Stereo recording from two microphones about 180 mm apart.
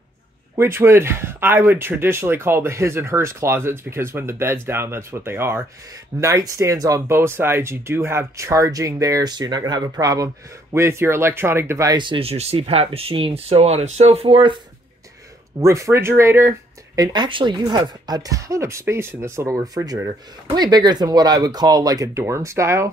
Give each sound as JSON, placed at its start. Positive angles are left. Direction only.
{"t": 0.6, "sound": "speech", "side_deg": -15}
{"t": 15.6, "sound": "speech", "side_deg": -15}